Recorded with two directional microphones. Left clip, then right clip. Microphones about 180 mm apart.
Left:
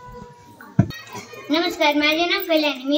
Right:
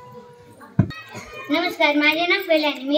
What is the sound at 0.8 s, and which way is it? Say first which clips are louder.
Music: left 2 dB; 50° left (ahead or behind).